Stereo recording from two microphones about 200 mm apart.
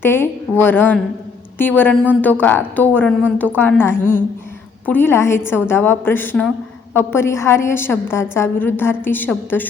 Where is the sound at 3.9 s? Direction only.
40° left (ahead or behind).